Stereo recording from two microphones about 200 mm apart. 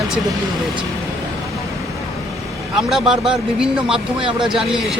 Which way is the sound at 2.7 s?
Centre (ahead or behind).